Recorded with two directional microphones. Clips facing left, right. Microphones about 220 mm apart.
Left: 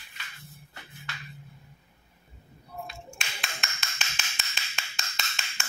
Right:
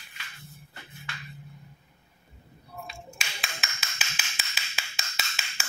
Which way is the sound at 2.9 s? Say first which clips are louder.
Even; centre (ahead or behind).